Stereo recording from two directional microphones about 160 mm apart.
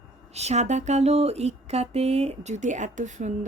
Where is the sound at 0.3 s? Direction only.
45° right (ahead or behind).